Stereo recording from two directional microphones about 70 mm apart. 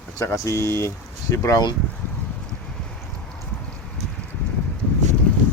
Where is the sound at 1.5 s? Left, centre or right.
Left.